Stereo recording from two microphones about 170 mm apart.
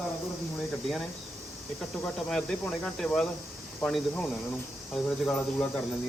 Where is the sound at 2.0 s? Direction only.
5° left (ahead or behind).